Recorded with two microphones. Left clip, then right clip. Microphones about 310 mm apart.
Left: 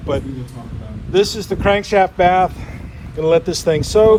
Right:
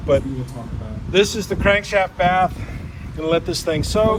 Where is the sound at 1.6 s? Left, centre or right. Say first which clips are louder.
Left 3 dB; centre.